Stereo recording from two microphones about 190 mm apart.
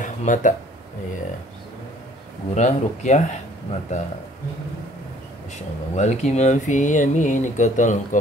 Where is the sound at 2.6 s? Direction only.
35° left (ahead or behind).